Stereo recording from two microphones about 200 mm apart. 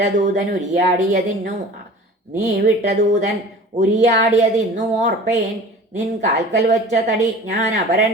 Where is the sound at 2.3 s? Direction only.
40° right (ahead or behind).